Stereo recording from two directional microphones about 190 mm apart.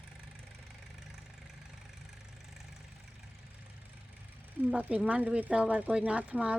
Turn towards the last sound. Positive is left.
turn(degrees=-5)  # may be behind; listen again after turning